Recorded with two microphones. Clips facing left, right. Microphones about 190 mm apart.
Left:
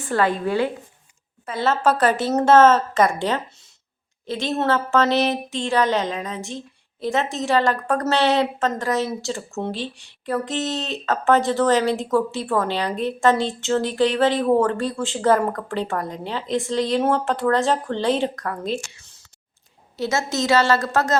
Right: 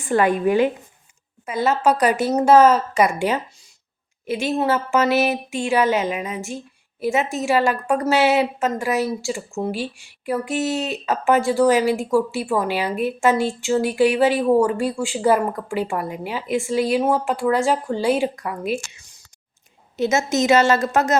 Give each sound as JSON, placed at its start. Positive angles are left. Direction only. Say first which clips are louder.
{"t": 0.0, "sound": "a woman's voice", "louder": "right 3 dB", "side_deg": -15}